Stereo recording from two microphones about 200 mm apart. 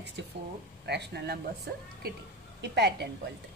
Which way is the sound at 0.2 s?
60° right (ahead or behind).